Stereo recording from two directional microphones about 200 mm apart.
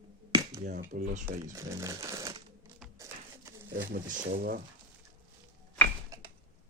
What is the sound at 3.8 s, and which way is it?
Speech, 50° right (ahead or behind).